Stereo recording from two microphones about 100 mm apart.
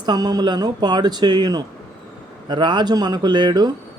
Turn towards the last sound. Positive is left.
turn(degrees=-45)  # may be behind; listen again after turning